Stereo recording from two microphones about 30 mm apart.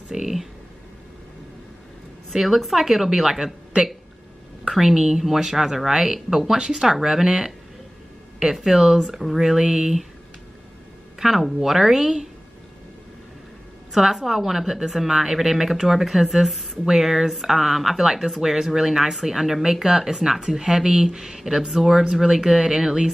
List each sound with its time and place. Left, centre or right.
0.1 s speech: centre
2.3 s speech: centre
8.6 s speech: centre
11.1 s speech: centre
13.9 s speech: centre
22.1 s speech: right